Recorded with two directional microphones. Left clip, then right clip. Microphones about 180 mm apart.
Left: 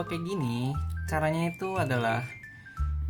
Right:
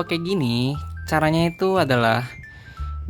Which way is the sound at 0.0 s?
50° right (ahead or behind).